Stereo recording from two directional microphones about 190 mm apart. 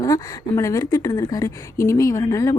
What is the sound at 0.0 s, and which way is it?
Speech, 15° left (ahead or behind).